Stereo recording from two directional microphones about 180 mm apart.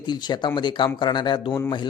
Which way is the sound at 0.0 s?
25° left (ahead or behind).